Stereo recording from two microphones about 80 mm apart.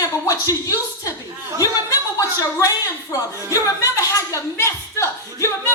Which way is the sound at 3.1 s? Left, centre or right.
Left.